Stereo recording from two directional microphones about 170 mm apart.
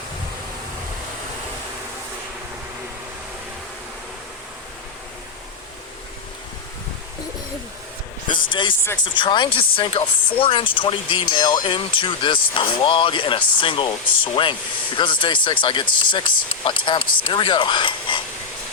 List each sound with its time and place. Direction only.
8.3 s speech: 30° left (ahead or behind)